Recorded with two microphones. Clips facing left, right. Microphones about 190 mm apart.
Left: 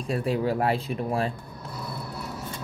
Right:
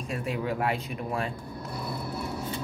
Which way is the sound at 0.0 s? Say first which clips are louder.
Left 5 dB; 35° left (ahead or behind).